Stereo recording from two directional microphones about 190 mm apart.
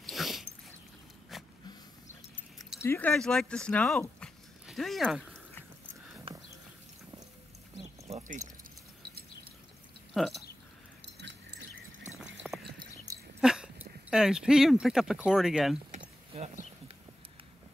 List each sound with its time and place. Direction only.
0.0 s dog: centre (ahead or behind)
1.3 s a sound: centre (ahead or behind)
2.8 s speech: 10° left (ahead or behind)
4.2 s dog: centre (ahead or behind)
8.1 s a sound: 40° right (ahead or behind)
10.1 s speech: centre (ahead or behind)
12.7 s a sound: 20° right (ahead or behind)
13.4 s speech: 5° right (ahead or behind)
16.0 s mechanisms: 35° right (ahead or behind)